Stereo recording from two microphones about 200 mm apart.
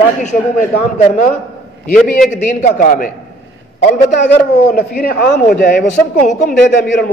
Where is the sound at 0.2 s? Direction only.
40° left (ahead or behind).